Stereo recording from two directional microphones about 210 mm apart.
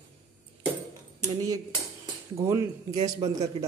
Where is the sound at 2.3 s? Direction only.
15° right (ahead or behind).